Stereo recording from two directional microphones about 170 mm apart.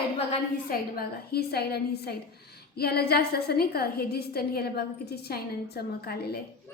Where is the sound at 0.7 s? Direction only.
65° left (ahead or behind).